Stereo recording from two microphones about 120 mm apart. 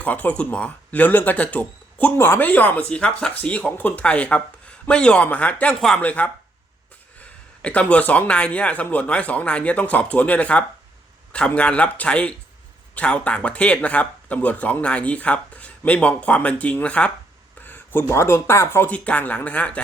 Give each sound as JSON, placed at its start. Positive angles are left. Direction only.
{"t": 0.0, "sound": "speech", "side_deg": 15}
{"t": 7.6, "sound": "speech", "side_deg": 10}
{"t": 17.6, "sound": "a sound", "side_deg": 15}
{"t": 18.1, "sound": "speech", "side_deg": 20}